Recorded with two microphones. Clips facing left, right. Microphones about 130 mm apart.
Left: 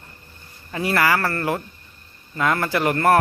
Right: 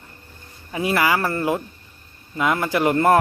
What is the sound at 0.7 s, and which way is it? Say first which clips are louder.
Speech: even; 15° right (ahead or behind).